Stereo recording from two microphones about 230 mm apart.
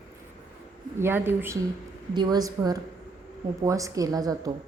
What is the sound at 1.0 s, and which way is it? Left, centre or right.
A woman's voice, centre.